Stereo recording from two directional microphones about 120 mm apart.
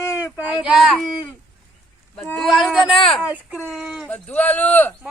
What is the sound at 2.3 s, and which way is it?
Speech, centre (ahead or behind).